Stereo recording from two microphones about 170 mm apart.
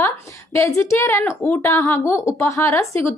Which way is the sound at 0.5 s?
15° left (ahead or behind).